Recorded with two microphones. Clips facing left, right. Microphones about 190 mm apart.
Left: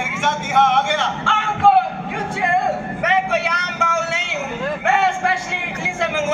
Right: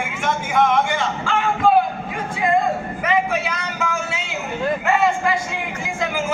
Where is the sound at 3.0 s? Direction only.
70° left (ahead or behind).